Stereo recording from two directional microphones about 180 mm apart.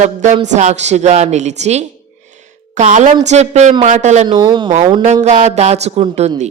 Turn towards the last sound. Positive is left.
turn(degrees=-40)  # may be behind; listen again after turning